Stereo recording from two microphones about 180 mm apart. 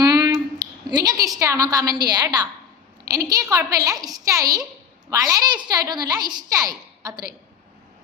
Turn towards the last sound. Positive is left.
turn(degrees=-20)  # may be behind; listen again after turning